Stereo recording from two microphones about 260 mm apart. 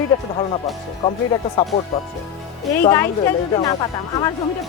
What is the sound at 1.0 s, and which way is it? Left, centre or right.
Speech, centre.